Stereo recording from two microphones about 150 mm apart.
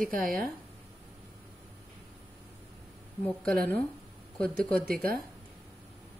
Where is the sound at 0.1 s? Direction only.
75° right (ahead or behind).